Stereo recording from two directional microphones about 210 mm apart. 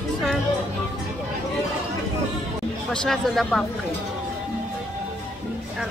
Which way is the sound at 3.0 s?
Centre (ahead or behind).